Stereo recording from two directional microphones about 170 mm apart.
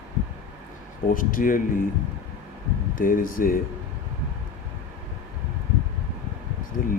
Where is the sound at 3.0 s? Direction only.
55° left (ahead or behind).